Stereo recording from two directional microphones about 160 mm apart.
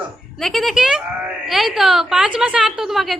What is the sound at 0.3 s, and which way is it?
A woman's voice, centre (ahead or behind).